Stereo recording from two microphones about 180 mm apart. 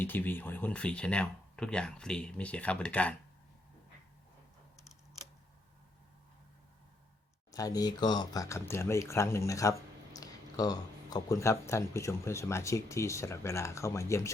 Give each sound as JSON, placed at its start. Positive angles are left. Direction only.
{"t": 0.0, "sound": "speech", "side_deg": 10}
{"t": 7.5, "sound": "speech", "side_deg": 20}